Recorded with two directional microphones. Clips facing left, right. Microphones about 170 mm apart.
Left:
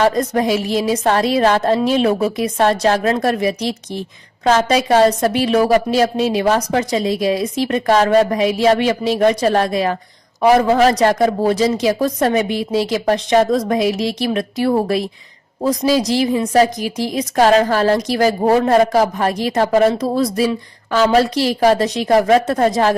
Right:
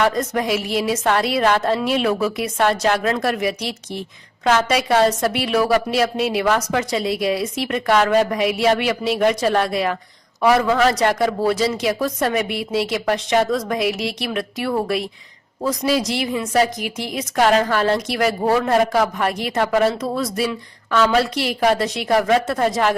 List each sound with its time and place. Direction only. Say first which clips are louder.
0.0 s a woman's voice: left 4 dB; 30° left (ahead or behind)